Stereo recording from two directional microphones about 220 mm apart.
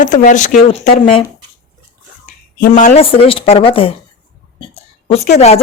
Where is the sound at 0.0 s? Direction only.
35° left (ahead or behind).